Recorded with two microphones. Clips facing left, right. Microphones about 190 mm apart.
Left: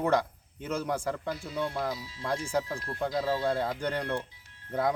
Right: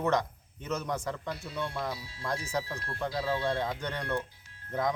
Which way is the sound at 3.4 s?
5° left (ahead or behind).